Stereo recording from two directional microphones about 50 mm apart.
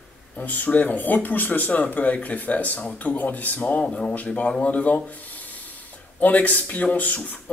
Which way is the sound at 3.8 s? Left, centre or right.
Centre.